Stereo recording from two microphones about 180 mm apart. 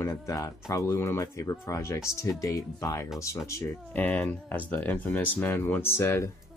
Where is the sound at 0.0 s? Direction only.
15° left (ahead or behind).